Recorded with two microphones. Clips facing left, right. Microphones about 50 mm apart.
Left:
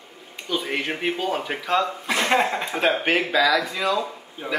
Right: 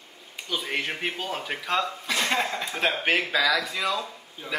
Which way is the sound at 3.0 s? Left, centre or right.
Centre.